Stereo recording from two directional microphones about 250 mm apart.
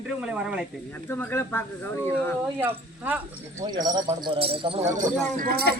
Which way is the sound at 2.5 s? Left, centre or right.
Centre.